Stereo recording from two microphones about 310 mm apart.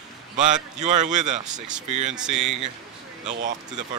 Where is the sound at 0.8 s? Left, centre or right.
Right.